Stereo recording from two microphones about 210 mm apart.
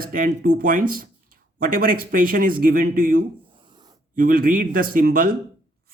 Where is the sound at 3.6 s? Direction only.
20° right (ahead or behind).